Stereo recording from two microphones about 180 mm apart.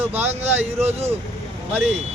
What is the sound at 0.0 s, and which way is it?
Speech, 10° right (ahead or behind).